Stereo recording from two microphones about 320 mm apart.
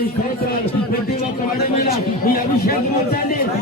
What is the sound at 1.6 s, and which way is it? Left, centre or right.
A man's voice, left.